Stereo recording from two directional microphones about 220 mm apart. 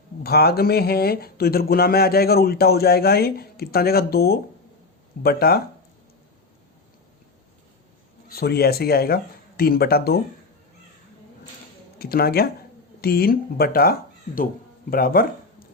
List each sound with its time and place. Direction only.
0.2 s speech: 45° left (ahead or behind)
8.3 s speech: 45° left (ahead or behind)
11.9 s speech: 45° left (ahead or behind)